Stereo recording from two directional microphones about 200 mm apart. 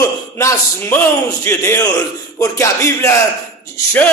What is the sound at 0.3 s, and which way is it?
A man's voice, 15° left (ahead or behind).